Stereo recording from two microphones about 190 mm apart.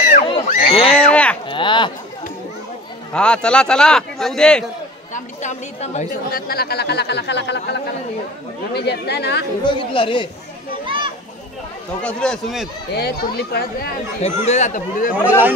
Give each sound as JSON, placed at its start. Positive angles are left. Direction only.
{"t": 0.0, "sound": "a sound", "side_deg": 45}
{"t": 0.7, "sound": "a sound", "side_deg": 30}
{"t": 1.1, "sound": "cattle", "side_deg": 5}
{"t": 1.5, "sound": "a sound", "side_deg": 25}
{"t": 3.1, "sound": "a man's voice", "side_deg": 5}
{"t": 5.1, "sound": "a woman's voice", "side_deg": 40}
{"t": 6.4, "sound": "speech", "side_deg": 55}
{"t": 9.9, "sound": "speech", "side_deg": 25}
{"t": 12.0, "sound": "a man's voice", "side_deg": 5}
{"t": 12.9, "sound": "speech", "side_deg": 60}
{"t": 14.2, "sound": "a woman's voice", "side_deg": 35}
{"t": 15.2, "sound": "speech", "side_deg": -10}